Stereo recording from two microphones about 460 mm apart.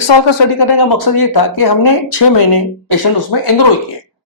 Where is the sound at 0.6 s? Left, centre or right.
Left.